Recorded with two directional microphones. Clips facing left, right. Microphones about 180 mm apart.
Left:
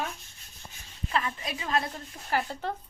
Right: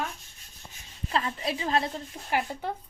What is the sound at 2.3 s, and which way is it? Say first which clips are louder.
Speech: right 1 dB; 15° right (ahead or behind).